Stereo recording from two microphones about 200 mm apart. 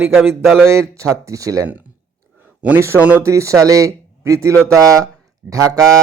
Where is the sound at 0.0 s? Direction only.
10° right (ahead or behind).